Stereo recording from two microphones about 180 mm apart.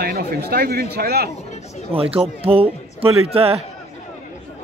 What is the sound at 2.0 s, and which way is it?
A man's voice, 30° right (ahead or behind).